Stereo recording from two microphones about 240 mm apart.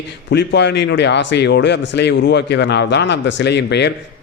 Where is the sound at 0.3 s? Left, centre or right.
Left.